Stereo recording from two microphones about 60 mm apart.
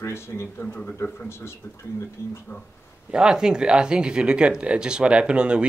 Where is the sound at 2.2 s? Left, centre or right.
Left.